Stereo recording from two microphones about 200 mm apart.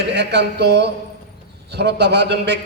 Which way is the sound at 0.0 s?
60° right (ahead or behind).